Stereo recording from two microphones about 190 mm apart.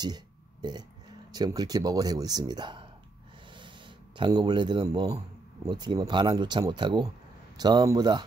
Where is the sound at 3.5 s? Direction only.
25° right (ahead or behind).